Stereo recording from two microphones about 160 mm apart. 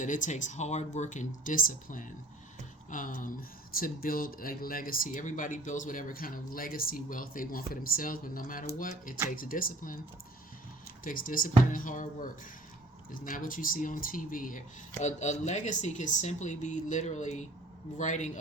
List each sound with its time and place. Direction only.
0.0 s speech: 50° left (ahead or behind)
11.0 s speech: 60° left (ahead or behind)
15.0 s speech: 45° left (ahead or behind)